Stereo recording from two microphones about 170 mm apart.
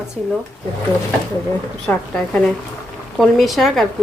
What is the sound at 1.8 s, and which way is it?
Speech, 5° left (ahead or behind).